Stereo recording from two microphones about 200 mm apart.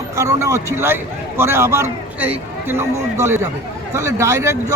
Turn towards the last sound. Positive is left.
turn(degrees=-15)  # may be behind; listen again after turning